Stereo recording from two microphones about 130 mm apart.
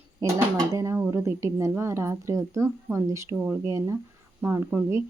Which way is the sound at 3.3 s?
10° right (ahead or behind).